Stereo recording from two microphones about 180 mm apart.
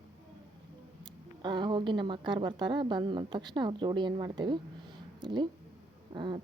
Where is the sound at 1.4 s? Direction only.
25° right (ahead or behind).